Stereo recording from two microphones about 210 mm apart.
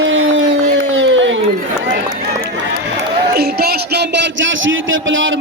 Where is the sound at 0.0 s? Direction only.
65° right (ahead or behind).